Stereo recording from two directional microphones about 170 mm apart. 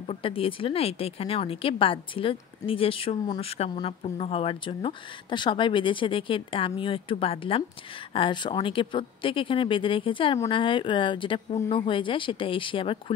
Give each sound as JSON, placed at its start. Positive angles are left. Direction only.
{"t": 0.0, "sound": "a woman's voice", "side_deg": 35}